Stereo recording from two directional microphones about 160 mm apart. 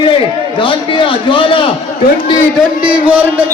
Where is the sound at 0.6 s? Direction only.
30° left (ahead or behind).